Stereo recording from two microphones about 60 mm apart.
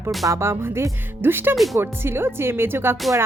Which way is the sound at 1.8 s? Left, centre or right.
Right.